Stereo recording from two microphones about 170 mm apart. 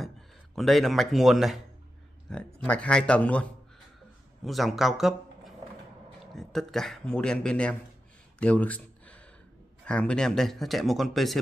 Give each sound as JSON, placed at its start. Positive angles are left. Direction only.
{"t": 0.6, "sound": "a man's voice", "side_deg": 0}
{"t": 8.4, "sound": "a sound", "side_deg": 10}
{"t": 9.8, "sound": "speech", "side_deg": 5}